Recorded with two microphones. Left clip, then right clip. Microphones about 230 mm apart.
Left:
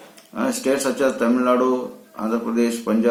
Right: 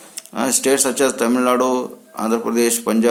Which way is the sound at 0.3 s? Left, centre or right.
Right.